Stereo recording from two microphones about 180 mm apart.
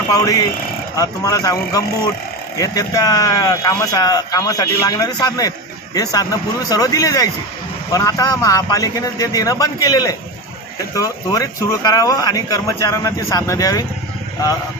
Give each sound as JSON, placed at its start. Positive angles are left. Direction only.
{"t": 0.1, "sound": "speech", "side_deg": 20}